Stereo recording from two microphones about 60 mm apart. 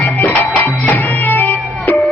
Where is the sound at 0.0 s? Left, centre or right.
Left.